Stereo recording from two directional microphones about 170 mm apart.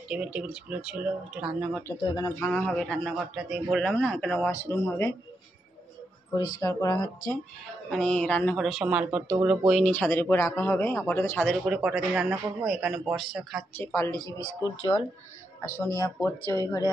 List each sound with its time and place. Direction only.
0.1 s a man's voice: 5° right (ahead or behind)
1.7 s speech: 10° left (ahead or behind)
2.0 s speech: 25° left (ahead or behind)
2.4 s a man's voice: 10° left (ahead or behind)
6.3 s speech: 20° left (ahead or behind)
7.9 s a man's voice: 5° left (ahead or behind)
9.9 s speech: 10° left (ahead or behind)
11.4 s a man's voice: 5° right (ahead or behind)
13.7 s speech: 15° left (ahead or behind)
14.1 s speech: 20° right (ahead or behind)
15.6 s speech: 15° left (ahead or behind)